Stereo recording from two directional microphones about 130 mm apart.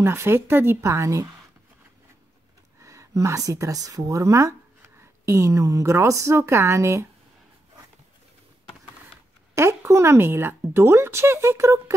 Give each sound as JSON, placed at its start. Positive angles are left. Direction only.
{"t": 0.0, "sound": "speech", "side_deg": -20}
{"t": 2.8, "sound": "speech", "side_deg": -25}
{"t": 9.6, "sound": "speech", "side_deg": -20}